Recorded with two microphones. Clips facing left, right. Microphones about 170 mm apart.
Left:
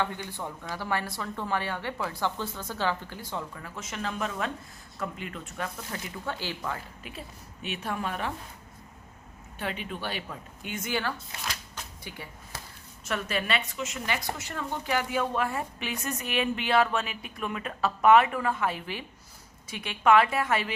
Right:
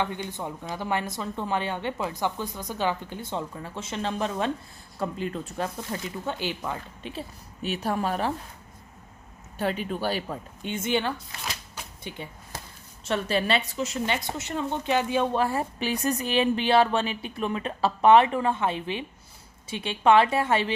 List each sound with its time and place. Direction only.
0.0 s a woman's voice: 20° right (ahead or behind); by 8.3 s 35° right (ahead or behind)
9.6 s a woman's voice: 40° right (ahead or behind)